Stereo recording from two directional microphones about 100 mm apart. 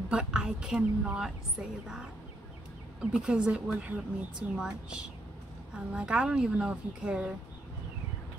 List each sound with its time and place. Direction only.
0.1 s a woman's voice: 10° right (ahead or behind)